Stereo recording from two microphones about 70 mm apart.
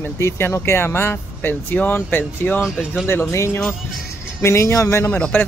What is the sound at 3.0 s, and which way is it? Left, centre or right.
Speech, left.